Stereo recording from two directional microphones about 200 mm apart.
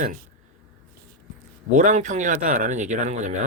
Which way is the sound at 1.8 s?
35° right (ahead or behind).